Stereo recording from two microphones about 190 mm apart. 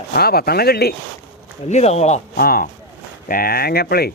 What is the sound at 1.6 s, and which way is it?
Speech, 35° left (ahead or behind).